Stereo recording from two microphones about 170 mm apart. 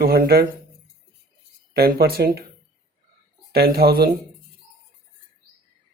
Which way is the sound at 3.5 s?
65° right (ahead or behind).